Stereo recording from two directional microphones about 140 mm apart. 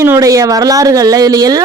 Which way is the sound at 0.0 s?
20° right (ahead or behind).